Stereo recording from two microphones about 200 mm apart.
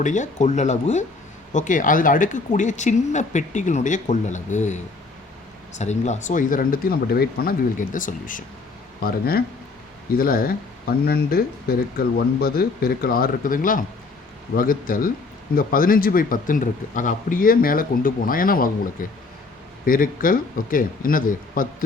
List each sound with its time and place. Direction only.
0.0 s speech: 35° left (ahead or behind)